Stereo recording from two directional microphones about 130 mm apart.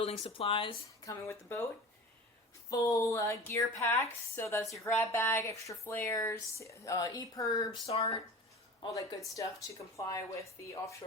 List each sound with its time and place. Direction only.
0.0 s speech: 50° left (ahead or behind)
1.0 s speech: 20° left (ahead or behind)
2.6 s speech: 25° left (ahead or behind)
7.9 s speech: 50° left (ahead or behind)
8.9 s speech: 25° left (ahead or behind)